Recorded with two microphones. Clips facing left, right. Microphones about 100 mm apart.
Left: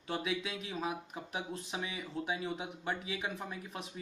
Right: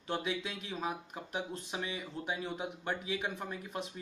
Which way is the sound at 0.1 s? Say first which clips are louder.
Even; 5° left (ahead or behind).